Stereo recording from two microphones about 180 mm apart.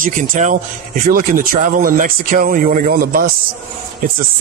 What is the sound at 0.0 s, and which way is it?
Speech, 45° right (ahead or behind).